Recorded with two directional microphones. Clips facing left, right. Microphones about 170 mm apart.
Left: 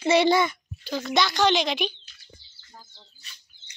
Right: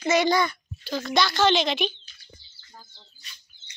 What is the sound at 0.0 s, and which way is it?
A child's voice, 30° left (ahead or behind).